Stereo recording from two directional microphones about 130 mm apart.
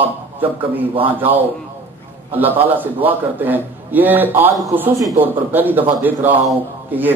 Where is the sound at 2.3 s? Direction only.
15° right (ahead or behind).